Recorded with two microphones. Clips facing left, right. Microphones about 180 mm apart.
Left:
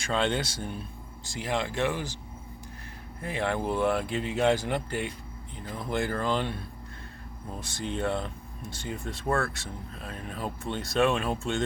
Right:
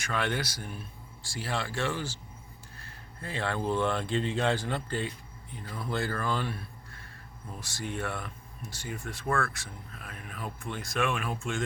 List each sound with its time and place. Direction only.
0.0 s speech: 25° left (ahead or behind)
3.2 s speech: 15° left (ahead or behind)
7.9 s speech: 20° left (ahead or behind)